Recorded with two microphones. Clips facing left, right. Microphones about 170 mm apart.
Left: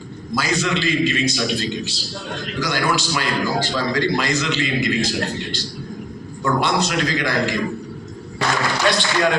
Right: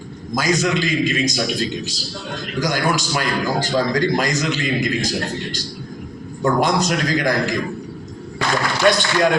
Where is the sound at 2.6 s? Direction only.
45° right (ahead or behind).